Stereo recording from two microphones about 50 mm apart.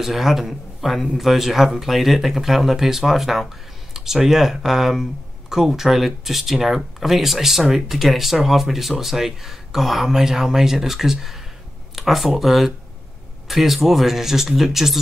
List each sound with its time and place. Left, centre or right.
0.0 s a man's voice: centre